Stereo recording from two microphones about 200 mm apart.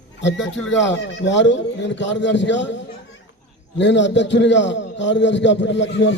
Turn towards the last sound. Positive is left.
turn(degrees=65)  # may be behind; listen again after turning